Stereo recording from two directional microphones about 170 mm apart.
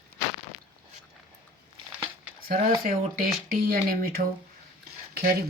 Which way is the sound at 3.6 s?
60° right (ahead or behind).